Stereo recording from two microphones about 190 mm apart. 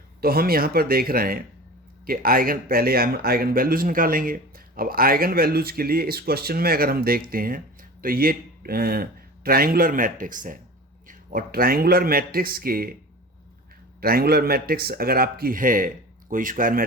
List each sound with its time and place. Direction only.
0.2 s speech: 50° right (ahead or behind)
14.0 s speech: 50° right (ahead or behind)